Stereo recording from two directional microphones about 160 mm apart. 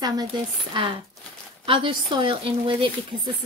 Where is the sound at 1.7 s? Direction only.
30° right (ahead or behind).